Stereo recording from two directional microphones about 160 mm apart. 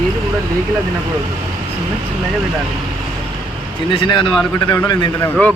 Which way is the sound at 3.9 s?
30° left (ahead or behind).